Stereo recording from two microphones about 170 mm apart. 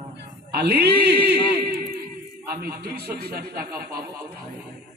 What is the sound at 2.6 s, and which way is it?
A man's voice, 65° right (ahead or behind).